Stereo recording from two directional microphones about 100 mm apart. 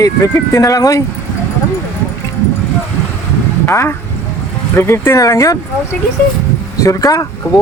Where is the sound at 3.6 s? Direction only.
25° left (ahead or behind).